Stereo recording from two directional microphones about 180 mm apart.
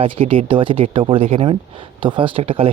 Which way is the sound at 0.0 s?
30° right (ahead or behind).